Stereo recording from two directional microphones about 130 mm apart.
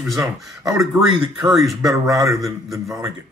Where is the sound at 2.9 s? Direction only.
20° right (ahead or behind).